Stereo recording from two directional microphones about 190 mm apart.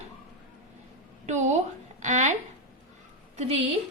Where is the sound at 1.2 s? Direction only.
40° right (ahead or behind).